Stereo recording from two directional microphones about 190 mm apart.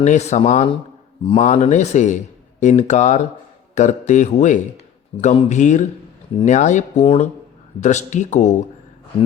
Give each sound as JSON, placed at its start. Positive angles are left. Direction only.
{"t": 0.0, "sound": "speech", "side_deg": 35}
{"t": 5.1, "sound": "speech", "side_deg": 30}
{"t": 5.5, "sound": "speech", "side_deg": 40}